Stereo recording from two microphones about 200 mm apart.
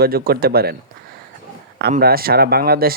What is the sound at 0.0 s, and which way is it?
Speech, 50° right (ahead or behind).